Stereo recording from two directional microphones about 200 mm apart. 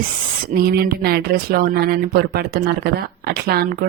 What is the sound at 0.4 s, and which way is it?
Speech, 50° right (ahead or behind).